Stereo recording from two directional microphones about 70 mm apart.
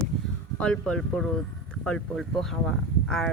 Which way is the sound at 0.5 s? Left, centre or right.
Centre.